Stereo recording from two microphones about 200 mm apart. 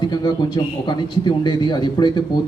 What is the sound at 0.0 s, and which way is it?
A man's voice, 20° left (ahead or behind).